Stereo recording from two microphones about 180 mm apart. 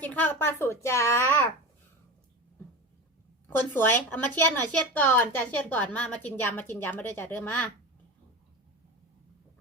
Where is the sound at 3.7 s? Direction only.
10° left (ahead or behind).